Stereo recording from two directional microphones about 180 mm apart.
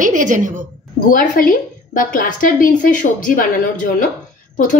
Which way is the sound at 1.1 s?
50° left (ahead or behind).